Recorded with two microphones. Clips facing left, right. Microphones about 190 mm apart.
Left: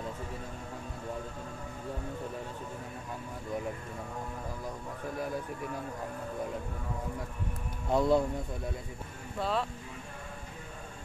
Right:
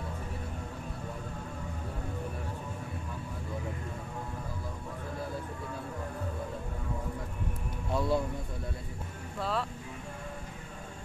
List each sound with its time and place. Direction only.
7.9 s speech: 20° left (ahead or behind)
9.4 s speech: centre (ahead or behind)